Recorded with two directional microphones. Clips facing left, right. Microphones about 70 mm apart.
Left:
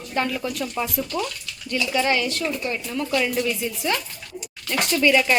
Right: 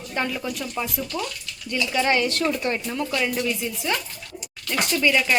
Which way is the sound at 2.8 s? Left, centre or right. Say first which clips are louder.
Left 2 dB; right.